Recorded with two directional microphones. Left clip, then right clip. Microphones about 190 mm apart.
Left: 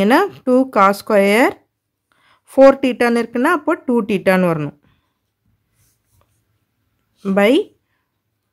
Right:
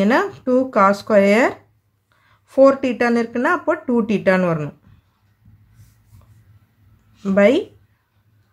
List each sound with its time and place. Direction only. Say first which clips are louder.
0.0 s speech: left 3 dB; 40° left (ahead or behind)
7.2 s speech: left 1 dB; 40° left (ahead or behind)